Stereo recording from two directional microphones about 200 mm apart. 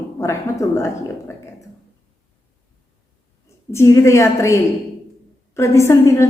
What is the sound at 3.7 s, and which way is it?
A woman's voice, 15° left (ahead or behind).